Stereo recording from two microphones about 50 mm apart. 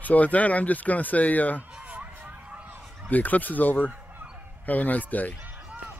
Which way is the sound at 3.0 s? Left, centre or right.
Left.